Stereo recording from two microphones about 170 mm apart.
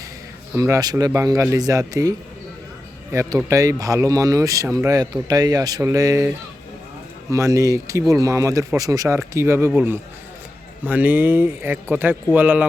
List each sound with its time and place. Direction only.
0.5 s speech: 15° right (ahead or behind)